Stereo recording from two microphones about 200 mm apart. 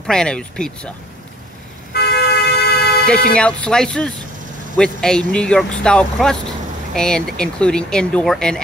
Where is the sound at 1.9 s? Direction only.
55° left (ahead or behind).